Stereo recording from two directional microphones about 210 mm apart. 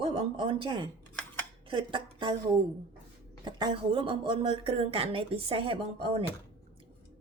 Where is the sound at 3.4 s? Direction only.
20° right (ahead or behind).